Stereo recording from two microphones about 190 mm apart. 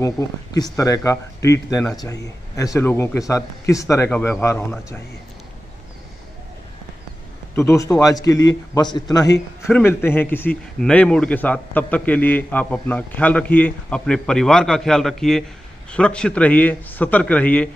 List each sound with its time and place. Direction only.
0.0 s a man's voice: 15° left (ahead or behind)
7.5 s a man's voice: 15° left (ahead or behind)
9.6 s a man's voice: 10° left (ahead or behind)